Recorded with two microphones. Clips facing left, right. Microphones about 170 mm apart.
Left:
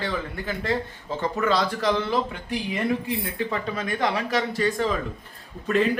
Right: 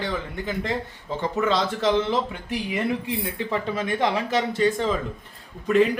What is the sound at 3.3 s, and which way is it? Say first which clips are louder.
A man's voice: right 1 dB; 25° right (ahead or behind).